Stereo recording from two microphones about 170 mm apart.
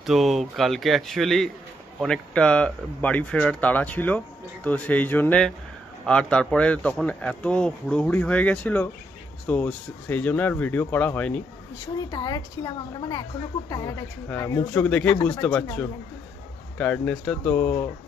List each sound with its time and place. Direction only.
0.0 s speech: centre (ahead or behind)
12.1 s a woman's voice: 25° left (ahead or behind)